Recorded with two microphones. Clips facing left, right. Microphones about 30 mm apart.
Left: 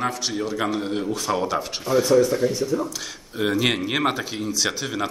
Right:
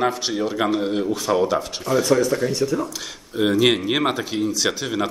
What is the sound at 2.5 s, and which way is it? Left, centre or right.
Speech, right.